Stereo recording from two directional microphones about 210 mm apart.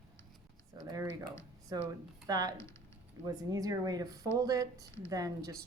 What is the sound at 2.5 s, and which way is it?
Speech, 15° left (ahead or behind).